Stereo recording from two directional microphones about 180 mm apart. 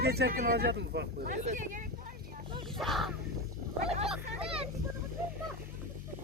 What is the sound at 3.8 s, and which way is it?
Speech, 35° right (ahead or behind).